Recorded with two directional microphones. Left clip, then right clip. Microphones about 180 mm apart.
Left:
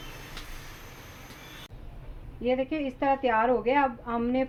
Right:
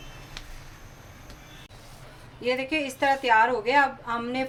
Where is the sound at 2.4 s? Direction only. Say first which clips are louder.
Right 1 dB; 30° left (ahead or behind).